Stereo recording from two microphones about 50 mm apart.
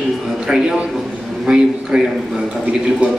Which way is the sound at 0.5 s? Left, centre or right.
Centre.